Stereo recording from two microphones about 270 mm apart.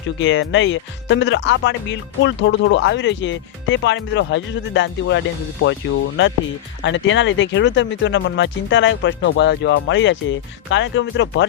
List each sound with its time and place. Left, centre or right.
0.2 s speech: left
6.8 s speech: left